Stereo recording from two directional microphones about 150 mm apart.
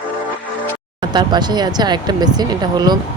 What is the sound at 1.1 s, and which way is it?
Speech, 30° right (ahead or behind).